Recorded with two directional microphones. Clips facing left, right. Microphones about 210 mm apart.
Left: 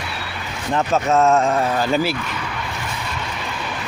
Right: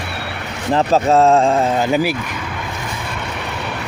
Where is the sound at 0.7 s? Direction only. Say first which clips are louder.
Right 4 dB; 35° right (ahead or behind); by 2.1 s 15° right (ahead or behind).